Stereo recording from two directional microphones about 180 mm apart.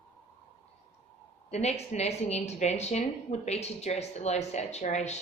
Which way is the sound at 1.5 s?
35° left (ahead or behind).